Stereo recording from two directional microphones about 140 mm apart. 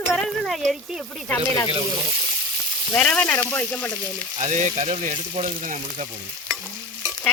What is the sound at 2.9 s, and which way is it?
Speech, 5° left (ahead or behind).